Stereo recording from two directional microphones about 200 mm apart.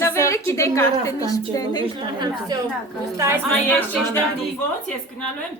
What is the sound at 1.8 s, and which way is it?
Speech, 25° right (ahead or behind).